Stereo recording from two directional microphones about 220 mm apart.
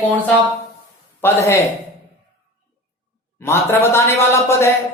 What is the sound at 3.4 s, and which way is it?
Speech, 10° left (ahead or behind).